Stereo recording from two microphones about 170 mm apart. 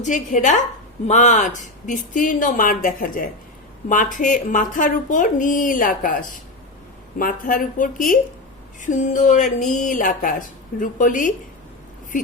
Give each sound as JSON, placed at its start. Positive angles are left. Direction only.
{"t": 0.0, "sound": "a woman's voice", "side_deg": 45}